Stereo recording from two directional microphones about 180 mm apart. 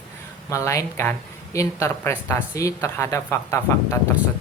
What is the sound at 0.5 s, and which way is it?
Speech, 15° left (ahead or behind).